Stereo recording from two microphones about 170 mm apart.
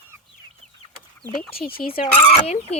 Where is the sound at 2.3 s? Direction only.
35° left (ahead or behind).